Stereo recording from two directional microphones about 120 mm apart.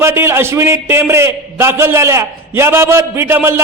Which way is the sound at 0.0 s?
20° right (ahead or behind).